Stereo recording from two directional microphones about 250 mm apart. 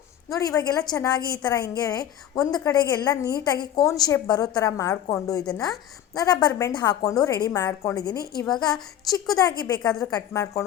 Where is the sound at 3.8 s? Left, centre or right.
Centre.